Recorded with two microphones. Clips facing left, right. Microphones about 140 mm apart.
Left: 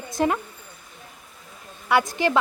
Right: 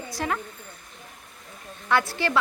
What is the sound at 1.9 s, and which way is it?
Speech, 15° left (ahead or behind).